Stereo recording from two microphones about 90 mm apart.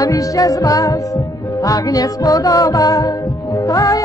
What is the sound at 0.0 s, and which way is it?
Music, 40° left (ahead or behind).